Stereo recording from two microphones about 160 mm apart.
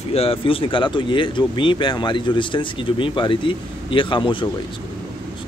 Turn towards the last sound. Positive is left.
turn(degrees=30)  # may be behind; listen again after turning